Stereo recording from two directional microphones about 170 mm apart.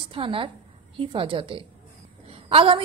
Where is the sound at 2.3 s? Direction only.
35° right (ahead or behind).